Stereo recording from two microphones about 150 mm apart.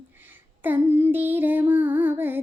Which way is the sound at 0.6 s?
15° right (ahead or behind).